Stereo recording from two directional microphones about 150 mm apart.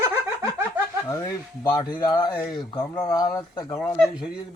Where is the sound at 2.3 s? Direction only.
15° left (ahead or behind).